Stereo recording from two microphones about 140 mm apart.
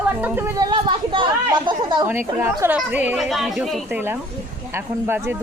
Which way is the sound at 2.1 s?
15° right (ahead or behind).